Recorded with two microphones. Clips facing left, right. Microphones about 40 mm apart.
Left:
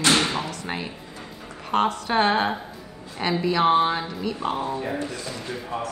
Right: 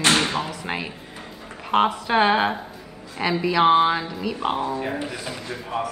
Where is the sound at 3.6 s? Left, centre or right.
Right.